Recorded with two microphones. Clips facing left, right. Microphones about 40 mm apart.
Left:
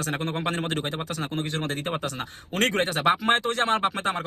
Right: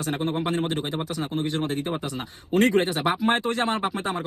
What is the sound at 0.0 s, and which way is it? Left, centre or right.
A man's voice, left.